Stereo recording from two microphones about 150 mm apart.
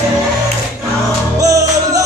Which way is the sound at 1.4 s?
20° right (ahead or behind).